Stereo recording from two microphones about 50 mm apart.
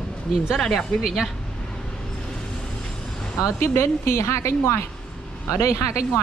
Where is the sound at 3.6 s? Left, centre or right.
Left.